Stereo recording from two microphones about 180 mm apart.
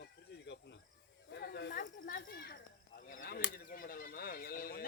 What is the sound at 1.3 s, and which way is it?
Snake, 65° left (ahead or behind).